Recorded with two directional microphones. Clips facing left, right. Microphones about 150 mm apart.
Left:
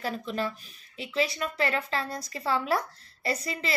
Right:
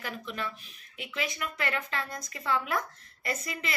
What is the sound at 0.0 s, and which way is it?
A woman's voice, 35° left (ahead or behind).